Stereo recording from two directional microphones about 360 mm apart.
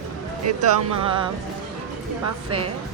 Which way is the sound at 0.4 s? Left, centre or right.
Right.